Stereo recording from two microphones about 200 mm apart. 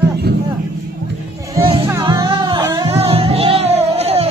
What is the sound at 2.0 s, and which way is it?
Music, 25° right (ahead or behind).